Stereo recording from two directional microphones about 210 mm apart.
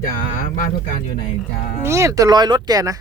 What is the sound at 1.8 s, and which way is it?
Speech, 15° right (ahead or behind).